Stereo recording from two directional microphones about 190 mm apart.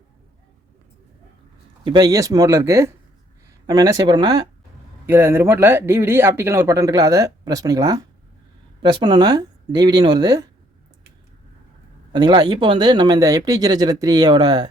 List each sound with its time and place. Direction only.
1.8 s speech: 25° right (ahead or behind)
12.1 s speech: 25° right (ahead or behind)